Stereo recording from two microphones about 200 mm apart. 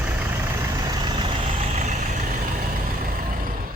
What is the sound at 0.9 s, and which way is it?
Vehicle, 20° right (ahead or behind).